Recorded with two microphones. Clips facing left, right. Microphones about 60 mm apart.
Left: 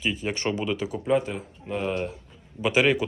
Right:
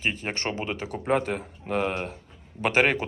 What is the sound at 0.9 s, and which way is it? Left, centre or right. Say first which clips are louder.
Speech: right 1 dB; right.